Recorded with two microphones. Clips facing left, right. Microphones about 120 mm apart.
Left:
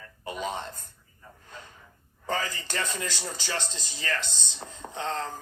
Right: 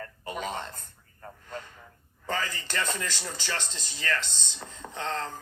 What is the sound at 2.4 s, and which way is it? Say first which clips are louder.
Speech: even; 15° left (ahead or behind).